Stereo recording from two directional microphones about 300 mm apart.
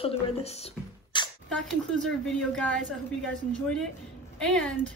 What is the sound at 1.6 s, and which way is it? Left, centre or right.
A woman's voice, centre.